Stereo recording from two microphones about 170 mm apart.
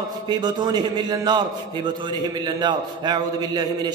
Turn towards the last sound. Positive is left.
turn(degrees=-25)  # may be behind; listen again after turning